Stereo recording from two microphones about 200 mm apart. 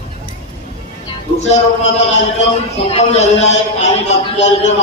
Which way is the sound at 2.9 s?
35° left (ahead or behind).